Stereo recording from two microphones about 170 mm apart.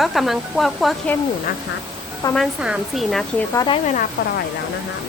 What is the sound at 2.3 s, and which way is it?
Speech, centre (ahead or behind).